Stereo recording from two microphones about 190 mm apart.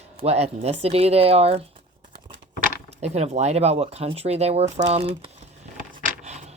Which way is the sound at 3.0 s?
35° right (ahead or behind).